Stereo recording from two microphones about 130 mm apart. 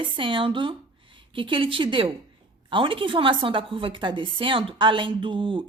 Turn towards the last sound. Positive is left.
turn(degrees=-40)  # may be behind; listen again after turning